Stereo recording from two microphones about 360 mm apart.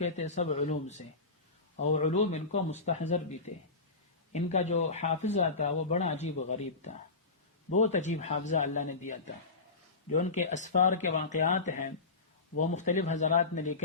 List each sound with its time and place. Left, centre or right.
0.0 s speech: centre
4.4 s speech: centre